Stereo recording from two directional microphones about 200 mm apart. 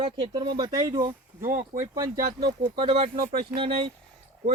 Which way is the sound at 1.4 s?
40° right (ahead or behind).